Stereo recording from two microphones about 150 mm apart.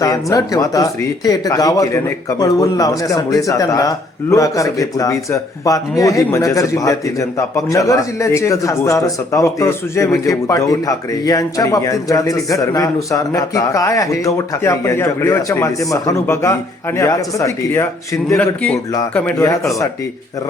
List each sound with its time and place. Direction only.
0.0 s a man's voice: 25° left (ahead or behind)
18.3 s a man's voice: 10° left (ahead or behind)